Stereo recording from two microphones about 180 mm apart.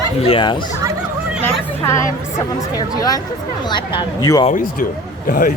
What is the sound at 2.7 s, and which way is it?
Speech, 20° left (ahead or behind).